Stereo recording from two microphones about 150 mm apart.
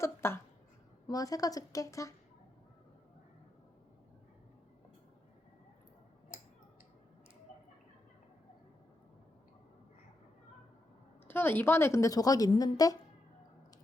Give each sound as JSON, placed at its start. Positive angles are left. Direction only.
{"t": 0.0, "sound": "a woman's voice", "side_deg": 15}
{"t": 11.3, "sound": "a woman's voice", "side_deg": 15}